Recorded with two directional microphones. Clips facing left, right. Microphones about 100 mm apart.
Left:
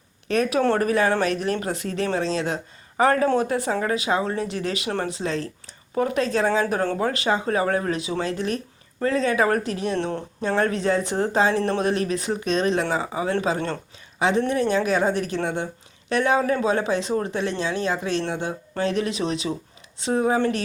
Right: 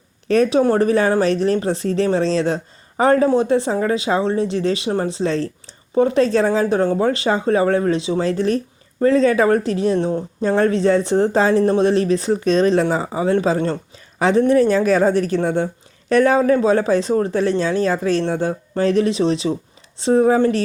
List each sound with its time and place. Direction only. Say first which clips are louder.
0.3 s speech: right 6 dB; 35° right (ahead or behind)
10.0 s speech: right 6 dB; 15° right (ahead or behind)
10.4 s speech: right 6 dB; 30° right (ahead or behind)